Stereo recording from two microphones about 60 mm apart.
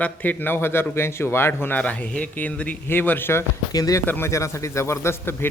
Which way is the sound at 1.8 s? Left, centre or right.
Left.